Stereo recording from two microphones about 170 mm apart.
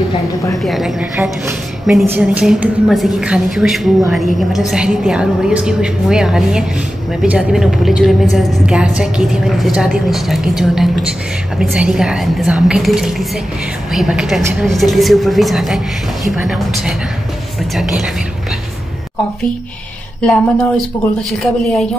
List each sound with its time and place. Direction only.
0.6 s a woman's voice: centre (ahead or behind)
20.2 s speech: 5° left (ahead or behind)